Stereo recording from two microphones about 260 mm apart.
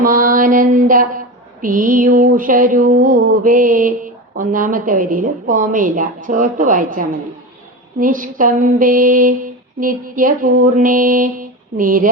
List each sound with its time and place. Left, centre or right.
0.0 s mantra: right